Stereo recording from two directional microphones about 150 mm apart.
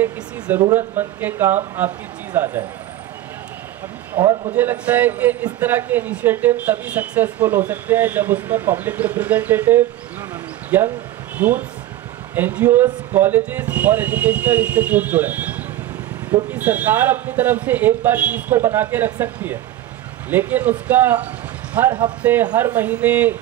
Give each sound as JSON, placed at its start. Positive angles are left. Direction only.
{"t": 0.7, "sound": "a man's voice", "side_deg": -15}
{"t": 4.1, "sound": "a man's voice", "side_deg": -25}
{"t": 4.6, "sound": "a man's voice", "side_deg": -10}
{"t": 16.5, "sound": "a man's voice", "side_deg": -10}